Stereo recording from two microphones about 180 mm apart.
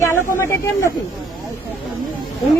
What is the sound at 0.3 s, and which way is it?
Speech, 15° left (ahead or behind).